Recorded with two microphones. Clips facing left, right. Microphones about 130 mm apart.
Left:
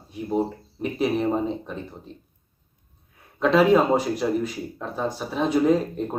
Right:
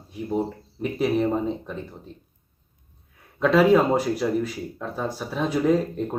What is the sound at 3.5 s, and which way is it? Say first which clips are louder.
Speech: even; 5° right (ahead or behind).